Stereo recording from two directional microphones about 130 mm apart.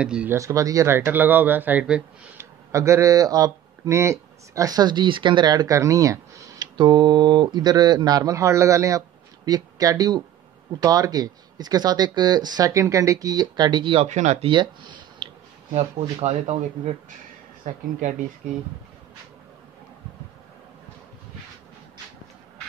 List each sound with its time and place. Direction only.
0.0 s speech: 10° right (ahead or behind)
0.3 s speech: 25° right (ahead or behind); by 2.4 s 10° right (ahead or behind)
2.7 s speech: 25° right (ahead or behind)
6.8 s speech: 35° right (ahead or behind)
14.0 s speech: 65° right (ahead or behind)
14.4 s speech: 35° right (ahead or behind)
15.7 s speech: 60° right (ahead or behind)